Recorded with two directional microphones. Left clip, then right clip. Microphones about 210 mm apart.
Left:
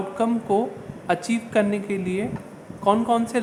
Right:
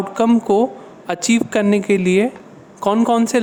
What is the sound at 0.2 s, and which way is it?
Speech, 50° right (ahead or behind).